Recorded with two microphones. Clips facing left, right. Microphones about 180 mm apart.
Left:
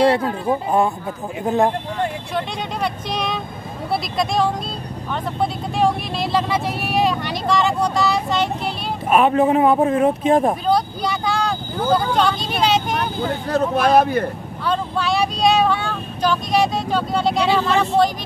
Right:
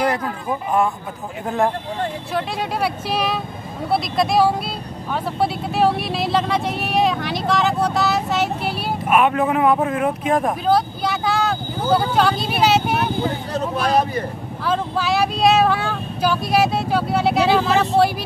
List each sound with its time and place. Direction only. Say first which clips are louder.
0.0 s speech: left 5 dB; 30° left (ahead or behind)
2.3 s speech: right 2 dB; 5° right (ahead or behind)
9.1 s speech: left 3 dB; 30° left (ahead or behind)
10.7 s vehicle: right 1 dB; centre (ahead or behind)
13.5 s speech: left 8 dB; 60° left (ahead or behind)
14.7 s speech: even; 5° right (ahead or behind)